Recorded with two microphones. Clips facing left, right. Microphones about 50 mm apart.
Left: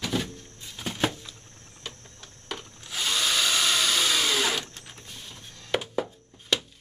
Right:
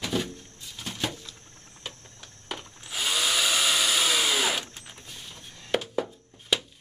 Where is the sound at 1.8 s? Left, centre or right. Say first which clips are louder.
Even; centre.